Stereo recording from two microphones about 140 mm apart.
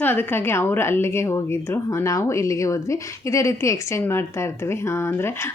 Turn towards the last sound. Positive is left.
turn(degrees=20)  # may be behind; listen again after turning